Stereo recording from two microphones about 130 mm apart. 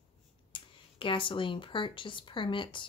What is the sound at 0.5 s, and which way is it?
Speech, 40° left (ahead or behind).